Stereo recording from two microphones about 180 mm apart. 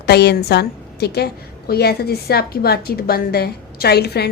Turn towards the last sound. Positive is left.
turn(degrees=65)  # may be behind; listen again after turning